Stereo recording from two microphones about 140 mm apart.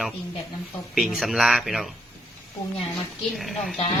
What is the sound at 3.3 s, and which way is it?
Speech, centre (ahead or behind).